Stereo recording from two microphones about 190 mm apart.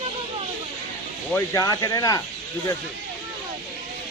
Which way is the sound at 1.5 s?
20° left (ahead or behind).